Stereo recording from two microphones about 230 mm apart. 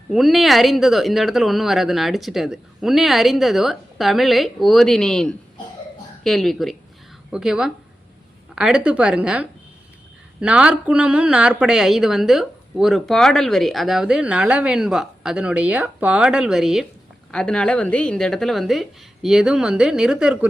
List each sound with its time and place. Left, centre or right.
0.1 s speech: centre